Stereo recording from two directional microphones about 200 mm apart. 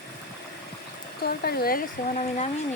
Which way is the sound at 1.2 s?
50° left (ahead or behind).